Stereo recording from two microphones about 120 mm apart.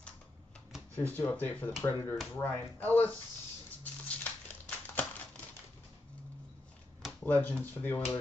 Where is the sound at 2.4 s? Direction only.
15° left (ahead or behind).